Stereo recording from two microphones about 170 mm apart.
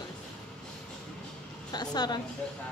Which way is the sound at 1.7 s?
25° left (ahead or behind).